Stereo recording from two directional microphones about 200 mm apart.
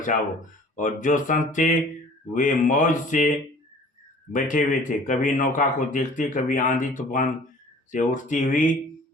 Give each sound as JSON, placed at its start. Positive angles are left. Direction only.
{"t": 0.8, "sound": "speech", "side_deg": 40}